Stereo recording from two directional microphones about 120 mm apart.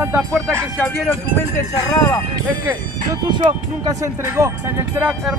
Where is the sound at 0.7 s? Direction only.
5° left (ahead or behind).